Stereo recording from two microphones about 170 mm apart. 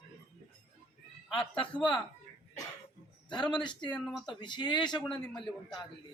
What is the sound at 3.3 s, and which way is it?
Speech, 30° left (ahead or behind).